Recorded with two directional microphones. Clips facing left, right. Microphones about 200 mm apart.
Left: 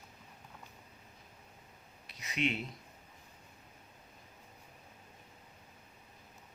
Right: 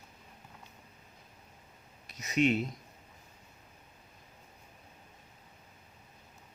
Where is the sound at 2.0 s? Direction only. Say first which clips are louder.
Right 7 dB; 45° right (ahead or behind).